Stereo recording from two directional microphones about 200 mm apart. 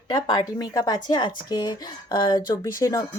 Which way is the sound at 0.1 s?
20° left (ahead or behind).